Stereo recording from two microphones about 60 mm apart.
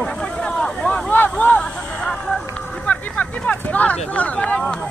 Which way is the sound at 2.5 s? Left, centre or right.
Centre.